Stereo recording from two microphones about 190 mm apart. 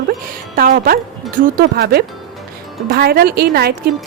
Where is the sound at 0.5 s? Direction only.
50° right (ahead or behind).